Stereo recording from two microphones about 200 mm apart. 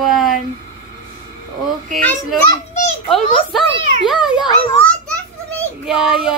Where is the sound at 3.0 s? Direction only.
Centre (ahead or behind).